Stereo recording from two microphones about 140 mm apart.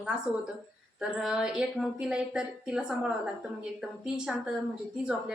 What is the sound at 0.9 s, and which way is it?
A woman's voice, 5° right (ahead or behind).